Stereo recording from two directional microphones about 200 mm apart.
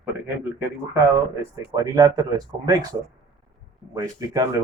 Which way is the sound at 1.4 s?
15° right (ahead or behind).